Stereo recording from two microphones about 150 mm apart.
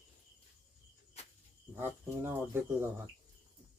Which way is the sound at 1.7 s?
15° right (ahead or behind).